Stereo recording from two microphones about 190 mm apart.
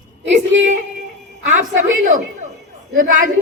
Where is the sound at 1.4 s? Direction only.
40° right (ahead or behind).